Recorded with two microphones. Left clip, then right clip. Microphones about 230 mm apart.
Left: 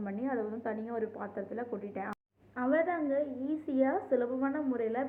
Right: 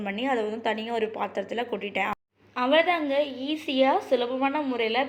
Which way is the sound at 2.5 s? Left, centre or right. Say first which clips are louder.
Right 8 dB; centre.